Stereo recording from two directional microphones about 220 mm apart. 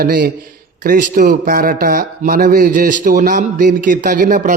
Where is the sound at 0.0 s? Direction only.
40° right (ahead or behind).